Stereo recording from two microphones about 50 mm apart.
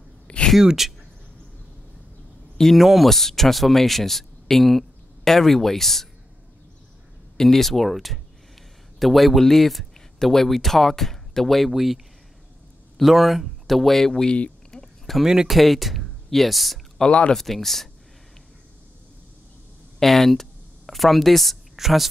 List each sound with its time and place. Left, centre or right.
0.6 s speech: centre
2.5 s speech: centre
7.3 s speech: centre
14.7 s a sound: centre
15.2 s speech: centre
15.5 s speech: centre
17.0 s speech: left
17.3 s speech: centre
20.0 s a woman's voice: centre